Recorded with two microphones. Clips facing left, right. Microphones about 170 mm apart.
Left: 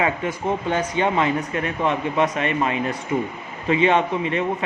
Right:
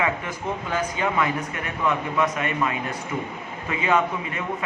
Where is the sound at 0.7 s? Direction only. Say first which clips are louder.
Left 3 dB; 25° left (ahead or behind).